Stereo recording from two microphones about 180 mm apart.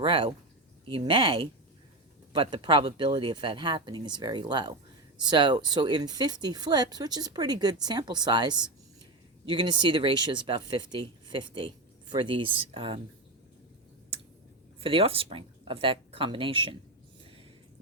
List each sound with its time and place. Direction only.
0.0 s speech: 30° right (ahead or behind)
14.8 s speech: 30° right (ahead or behind)